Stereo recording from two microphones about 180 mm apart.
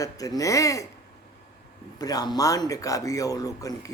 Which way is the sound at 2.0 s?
20° left (ahead or behind).